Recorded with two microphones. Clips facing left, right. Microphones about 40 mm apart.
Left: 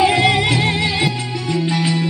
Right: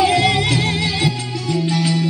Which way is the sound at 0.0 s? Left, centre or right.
Left.